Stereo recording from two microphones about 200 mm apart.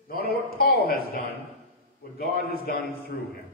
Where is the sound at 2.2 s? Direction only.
50° left (ahead or behind).